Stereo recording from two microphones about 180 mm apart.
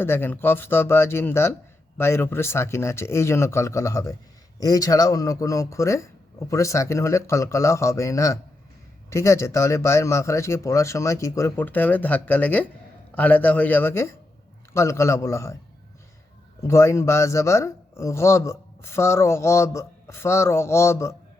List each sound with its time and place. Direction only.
0.0 s a man's voice: 10° left (ahead or behind)
16.6 s speech: 15° left (ahead or behind)